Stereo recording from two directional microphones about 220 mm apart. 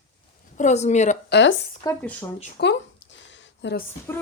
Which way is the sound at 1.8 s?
10° left (ahead or behind).